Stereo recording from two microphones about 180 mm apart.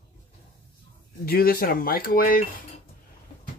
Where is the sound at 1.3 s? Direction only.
55° left (ahead or behind).